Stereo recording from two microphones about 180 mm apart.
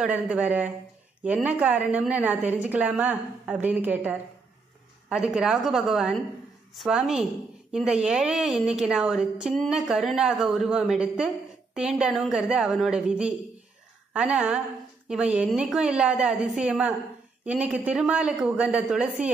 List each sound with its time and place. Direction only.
0.0 s a woman's voice: 5° right (ahead or behind)